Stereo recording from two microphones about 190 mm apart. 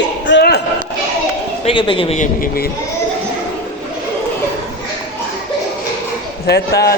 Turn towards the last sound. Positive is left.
turn(degrees=55)  # may be behind; listen again after turning